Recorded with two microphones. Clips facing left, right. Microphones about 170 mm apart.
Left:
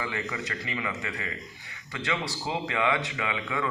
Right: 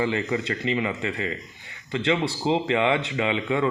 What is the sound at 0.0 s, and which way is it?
Speech, 30° right (ahead or behind).